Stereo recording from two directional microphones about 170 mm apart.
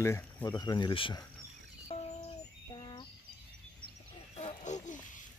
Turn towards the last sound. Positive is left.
turn(degrees=45)  # may be behind; listen again after turning